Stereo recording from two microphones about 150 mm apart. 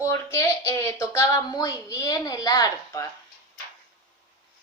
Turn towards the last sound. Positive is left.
turn(degrees=20)  # may be behind; listen again after turning